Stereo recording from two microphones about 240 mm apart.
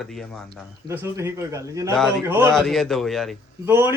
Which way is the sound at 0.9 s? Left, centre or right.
Centre.